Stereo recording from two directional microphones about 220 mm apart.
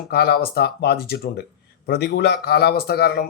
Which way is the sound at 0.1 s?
45° left (ahead or behind).